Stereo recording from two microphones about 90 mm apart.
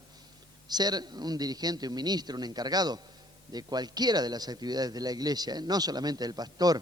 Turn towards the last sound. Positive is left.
turn(degrees=-45)  # may be behind; listen again after turning